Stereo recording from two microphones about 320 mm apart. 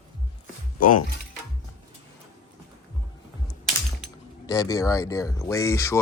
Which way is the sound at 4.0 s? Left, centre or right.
Centre.